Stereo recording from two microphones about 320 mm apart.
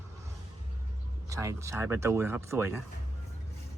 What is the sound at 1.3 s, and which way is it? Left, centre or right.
Speech, centre.